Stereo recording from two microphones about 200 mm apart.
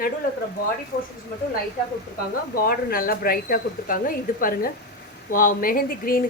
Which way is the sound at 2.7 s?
45° left (ahead or behind).